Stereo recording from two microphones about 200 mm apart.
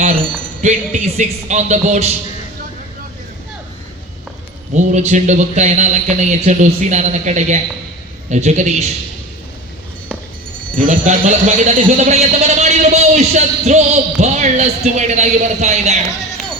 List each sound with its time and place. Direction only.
0.6 s a man's voice: 35° right (ahead or behind)
4.7 s a man's voice: 35° right (ahead or behind)
10.8 s a man's voice: 40° right (ahead or behind)